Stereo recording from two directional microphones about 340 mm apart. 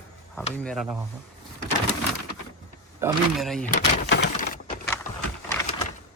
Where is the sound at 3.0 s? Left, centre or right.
Centre.